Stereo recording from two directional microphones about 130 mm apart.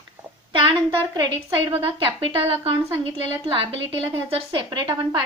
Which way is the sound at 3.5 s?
45° right (ahead or behind).